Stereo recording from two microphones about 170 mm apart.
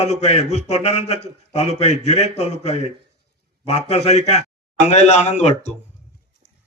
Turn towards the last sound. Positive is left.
turn(degrees=40)  # may be behind; listen again after turning